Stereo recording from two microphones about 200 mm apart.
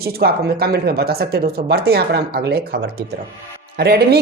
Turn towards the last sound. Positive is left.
turn(degrees=-55)  # may be behind; listen again after turning